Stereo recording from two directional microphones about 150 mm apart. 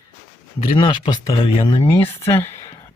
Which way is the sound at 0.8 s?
35° left (ahead or behind).